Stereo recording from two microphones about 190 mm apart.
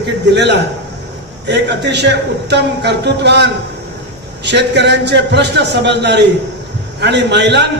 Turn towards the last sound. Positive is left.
turn(degrees=-65)  # may be behind; listen again after turning